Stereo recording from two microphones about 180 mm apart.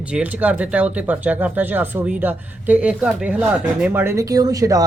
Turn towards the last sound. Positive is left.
turn(degrees=-20)  # may be behind; listen again after turning